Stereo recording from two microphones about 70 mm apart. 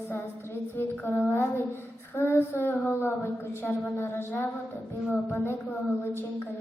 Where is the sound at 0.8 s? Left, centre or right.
Left.